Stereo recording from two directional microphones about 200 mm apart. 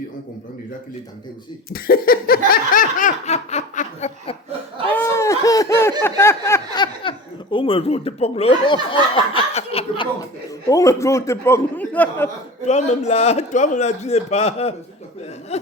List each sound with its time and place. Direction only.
1.7 s a sound: 50° left (ahead or behind)
2.5 s snicker: 40° left (ahead or behind)
4.9 s a sound: 10° left (ahead or behind)
6.8 s speech: 25° left (ahead or behind)
10.7 s a man's voice: 15° left (ahead or behind)
12.6 s a man's voice: 35° left (ahead or behind)